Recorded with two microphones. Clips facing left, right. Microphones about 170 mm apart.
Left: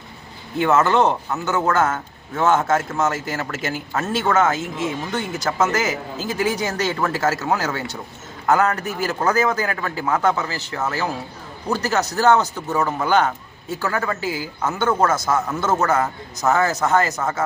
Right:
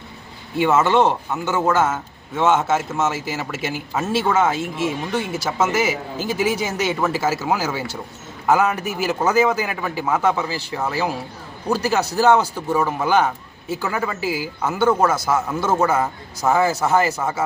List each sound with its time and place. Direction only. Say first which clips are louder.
0.6 s a man's voice: right 1 dB; 10° right (ahead or behind)